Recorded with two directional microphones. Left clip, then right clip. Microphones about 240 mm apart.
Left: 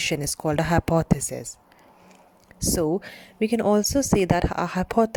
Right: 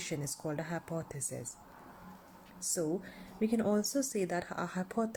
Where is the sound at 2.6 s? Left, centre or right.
Left.